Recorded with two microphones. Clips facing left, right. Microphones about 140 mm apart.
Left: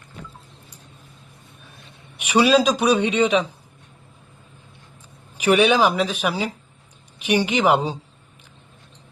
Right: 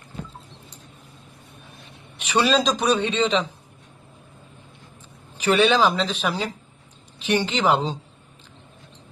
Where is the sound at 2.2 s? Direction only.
10° left (ahead or behind).